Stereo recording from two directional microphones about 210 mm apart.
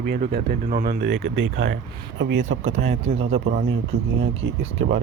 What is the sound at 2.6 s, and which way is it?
Speech, 30° right (ahead or behind).